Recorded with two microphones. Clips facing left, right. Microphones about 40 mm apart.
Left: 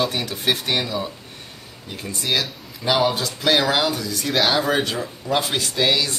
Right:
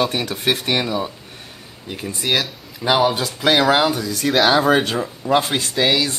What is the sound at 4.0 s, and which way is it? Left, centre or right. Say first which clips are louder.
Speech: right 3 dB; right.